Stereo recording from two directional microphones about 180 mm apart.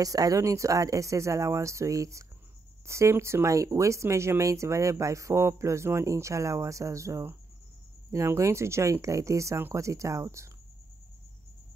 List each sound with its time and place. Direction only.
0.0 s speech: 20° right (ahead or behind)